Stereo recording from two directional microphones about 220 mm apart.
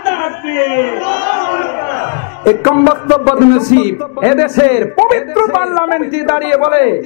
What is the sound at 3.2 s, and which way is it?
Speech, 30° left (ahead or behind).